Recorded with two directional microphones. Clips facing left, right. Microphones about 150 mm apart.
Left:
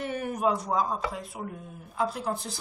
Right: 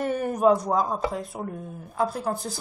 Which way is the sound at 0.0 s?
40° right (ahead or behind).